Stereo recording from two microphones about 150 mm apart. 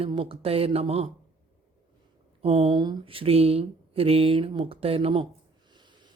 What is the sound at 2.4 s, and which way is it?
Speech, 45° right (ahead or behind).